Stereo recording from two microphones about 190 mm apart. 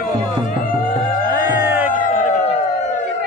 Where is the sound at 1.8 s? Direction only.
45° left (ahead or behind).